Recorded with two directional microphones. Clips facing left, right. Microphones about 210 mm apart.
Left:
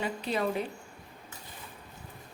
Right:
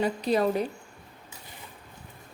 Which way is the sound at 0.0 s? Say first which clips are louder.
Right 6 dB; 40° right (ahead or behind).